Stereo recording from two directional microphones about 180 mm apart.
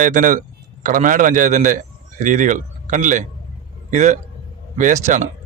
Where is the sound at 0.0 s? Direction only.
45° right (ahead or behind).